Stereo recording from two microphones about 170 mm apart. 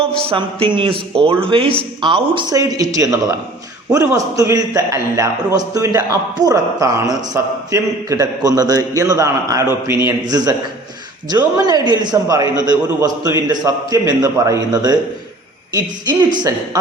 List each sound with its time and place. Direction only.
0.3 s a man's voice: 30° right (ahead or behind)